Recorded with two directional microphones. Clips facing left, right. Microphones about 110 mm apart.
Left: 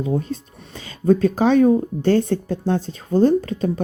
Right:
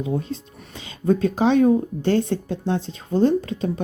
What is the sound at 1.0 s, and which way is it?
Speech, 45° left (ahead or behind).